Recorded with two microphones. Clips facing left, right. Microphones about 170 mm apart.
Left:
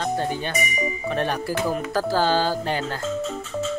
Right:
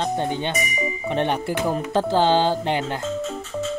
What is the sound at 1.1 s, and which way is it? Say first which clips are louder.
Speech: right 3 dB; 20° right (ahead or behind).